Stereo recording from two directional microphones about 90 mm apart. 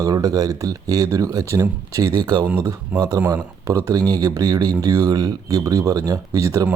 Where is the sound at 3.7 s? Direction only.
40° right (ahead or behind).